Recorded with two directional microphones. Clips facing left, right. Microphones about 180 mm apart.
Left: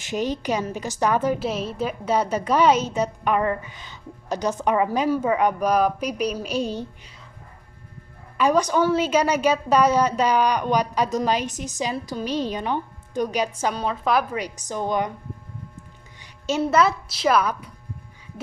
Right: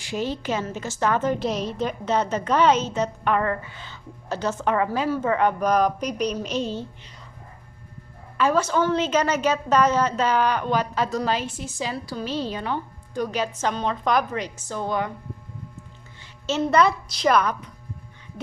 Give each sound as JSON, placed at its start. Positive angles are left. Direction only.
{"t": 0.0, "sound": "a woman's voice", "side_deg": 20}
{"t": 8.4, "sound": "a woman's voice", "side_deg": 15}
{"t": 16.2, "sound": "a woman's voice", "side_deg": 10}